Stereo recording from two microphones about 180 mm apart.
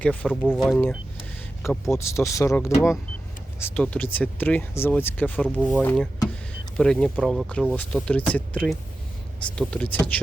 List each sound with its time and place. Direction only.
0.0 s speech: 5° left (ahead or behind)
1.9 s speech: 15° left (ahead or behind)